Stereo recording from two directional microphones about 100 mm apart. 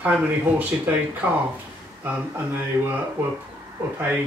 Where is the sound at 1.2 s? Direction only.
15° right (ahead or behind).